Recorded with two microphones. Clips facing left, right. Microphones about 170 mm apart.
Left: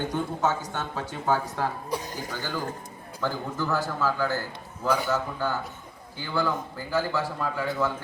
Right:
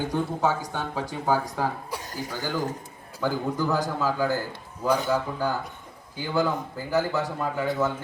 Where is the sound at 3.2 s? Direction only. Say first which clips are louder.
Right 4 dB; 15° right (ahead or behind).